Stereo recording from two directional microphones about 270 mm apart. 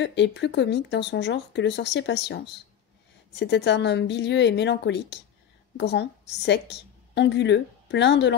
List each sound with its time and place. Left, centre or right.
0.0 s a woman's voice: left